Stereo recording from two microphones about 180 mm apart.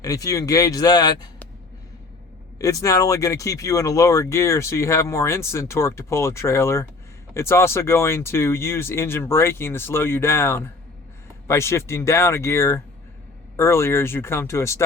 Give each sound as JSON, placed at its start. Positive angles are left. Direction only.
{"t": 0.0, "sound": "speech", "side_deg": 20}
{"t": 2.6, "sound": "speech", "side_deg": 20}